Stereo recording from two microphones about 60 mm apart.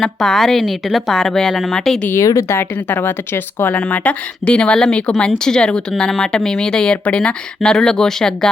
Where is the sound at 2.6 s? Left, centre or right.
Left.